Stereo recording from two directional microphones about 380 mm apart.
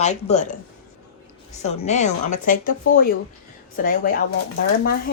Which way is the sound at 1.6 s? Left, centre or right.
Centre.